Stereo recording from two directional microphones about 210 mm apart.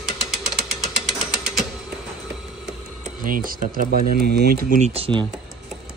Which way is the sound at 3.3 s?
40° right (ahead or behind).